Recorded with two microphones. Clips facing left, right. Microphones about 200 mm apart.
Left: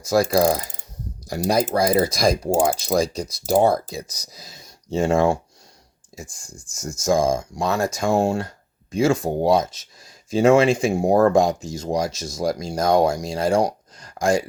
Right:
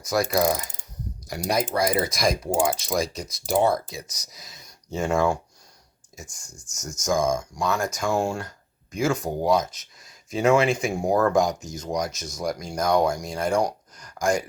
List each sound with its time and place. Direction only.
0.0 s mechanisms: 30° left (ahead or behind)
1.3 s speech: 30° left (ahead or behind)